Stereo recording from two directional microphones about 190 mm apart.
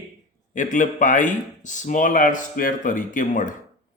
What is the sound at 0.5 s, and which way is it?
Speech, 40° left (ahead or behind).